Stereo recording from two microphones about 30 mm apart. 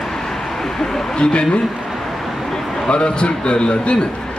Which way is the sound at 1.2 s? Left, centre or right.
Left.